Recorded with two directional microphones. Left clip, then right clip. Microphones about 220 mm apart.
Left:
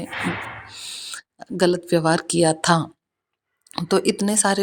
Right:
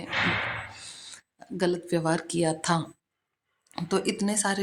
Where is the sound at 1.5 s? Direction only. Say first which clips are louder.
Left 8 dB; 35° left (ahead or behind).